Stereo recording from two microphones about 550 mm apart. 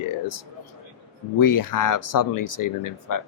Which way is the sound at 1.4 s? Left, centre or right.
Left.